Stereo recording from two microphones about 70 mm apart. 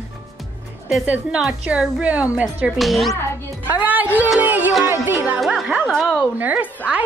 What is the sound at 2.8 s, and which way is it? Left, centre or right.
Speech, centre.